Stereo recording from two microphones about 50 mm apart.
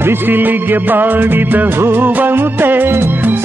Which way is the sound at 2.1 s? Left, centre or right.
Right.